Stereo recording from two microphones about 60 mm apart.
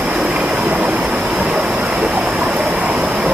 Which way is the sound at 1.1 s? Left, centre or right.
Centre.